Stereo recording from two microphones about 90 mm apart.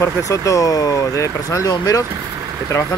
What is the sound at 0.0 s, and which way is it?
Speech, 35° left (ahead or behind).